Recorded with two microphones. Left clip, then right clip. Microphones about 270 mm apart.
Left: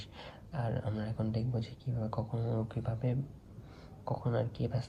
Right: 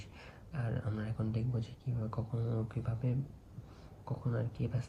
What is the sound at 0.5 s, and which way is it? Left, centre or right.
Speech, centre.